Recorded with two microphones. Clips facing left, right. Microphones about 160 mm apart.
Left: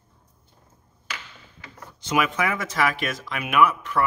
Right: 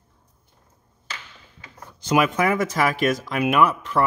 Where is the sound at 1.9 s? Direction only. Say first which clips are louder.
Right 4 dB; 40° right (ahead or behind).